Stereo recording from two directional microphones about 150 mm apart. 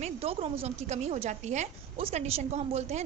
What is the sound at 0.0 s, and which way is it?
A woman's voice, 40° right (ahead or behind).